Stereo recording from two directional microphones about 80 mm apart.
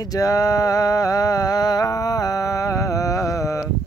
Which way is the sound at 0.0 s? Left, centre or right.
Left.